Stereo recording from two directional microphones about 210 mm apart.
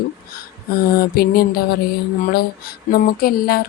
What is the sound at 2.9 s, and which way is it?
Speech, 45° left (ahead or behind).